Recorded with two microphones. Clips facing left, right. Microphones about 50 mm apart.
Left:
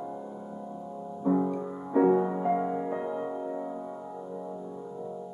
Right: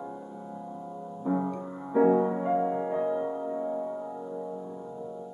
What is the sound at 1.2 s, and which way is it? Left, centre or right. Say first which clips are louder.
Music: left 3 dB; centre.